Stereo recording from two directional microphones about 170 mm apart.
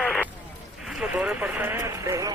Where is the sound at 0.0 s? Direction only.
5° left (ahead or behind).